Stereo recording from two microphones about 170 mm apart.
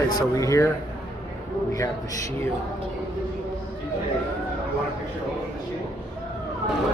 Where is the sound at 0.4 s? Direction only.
20° left (ahead or behind).